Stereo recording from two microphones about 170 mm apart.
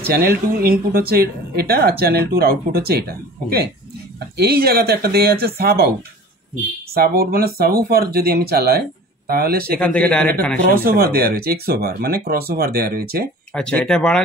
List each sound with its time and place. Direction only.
0.0 s speech: 65° right (ahead or behind)
6.9 s speech: 65° right (ahead or behind)
9.8 s a man's voice: 5° left (ahead or behind)
10.7 s speech: 60° right (ahead or behind)
13.5 s speech: 5° left (ahead or behind)